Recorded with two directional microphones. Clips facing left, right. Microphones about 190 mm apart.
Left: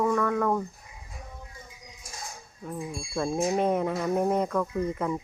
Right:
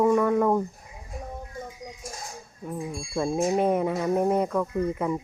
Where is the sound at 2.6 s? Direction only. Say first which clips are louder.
Right 2 dB; 10° right (ahead or behind).